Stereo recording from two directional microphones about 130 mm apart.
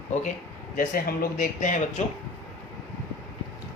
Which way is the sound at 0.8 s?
90° left.